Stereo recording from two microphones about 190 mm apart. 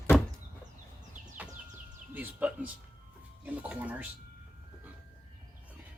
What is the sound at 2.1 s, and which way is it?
Speech, 10° right (ahead or behind).